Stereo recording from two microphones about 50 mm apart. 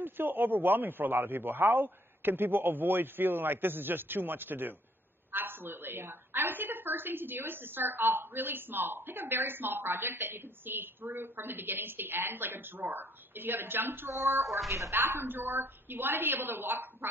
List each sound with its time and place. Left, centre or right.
0.0 s a woman's voice: right